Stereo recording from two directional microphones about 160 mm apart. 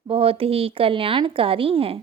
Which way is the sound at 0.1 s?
35° right (ahead or behind).